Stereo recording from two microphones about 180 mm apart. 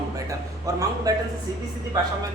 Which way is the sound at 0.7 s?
20° right (ahead or behind).